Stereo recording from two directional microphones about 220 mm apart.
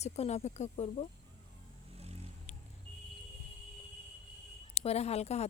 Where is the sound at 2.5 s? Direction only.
30° left (ahead or behind).